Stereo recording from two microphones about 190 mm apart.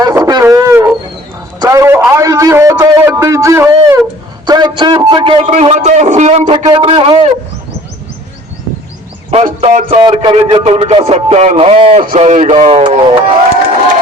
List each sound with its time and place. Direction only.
0.0 s a sound: 20° right (ahead or behind)
4.4 s a man's voice: 20° right (ahead or behind)
9.3 s a man's voice: 35° right (ahead or behind)